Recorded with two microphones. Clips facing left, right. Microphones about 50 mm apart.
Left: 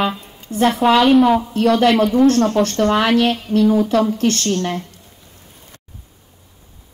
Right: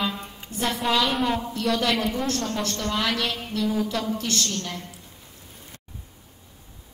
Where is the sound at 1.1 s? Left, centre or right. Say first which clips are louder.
Left 12 dB; centre.